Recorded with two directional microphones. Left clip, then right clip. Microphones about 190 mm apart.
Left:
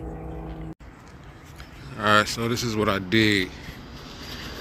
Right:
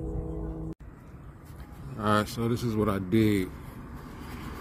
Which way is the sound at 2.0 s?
15° right (ahead or behind).